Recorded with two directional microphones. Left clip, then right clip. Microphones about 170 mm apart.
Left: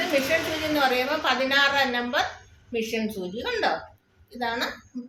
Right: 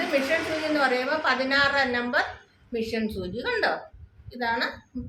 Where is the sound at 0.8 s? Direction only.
15° left (ahead or behind).